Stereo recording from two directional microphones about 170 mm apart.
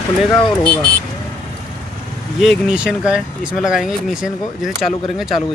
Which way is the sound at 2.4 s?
Centre (ahead or behind).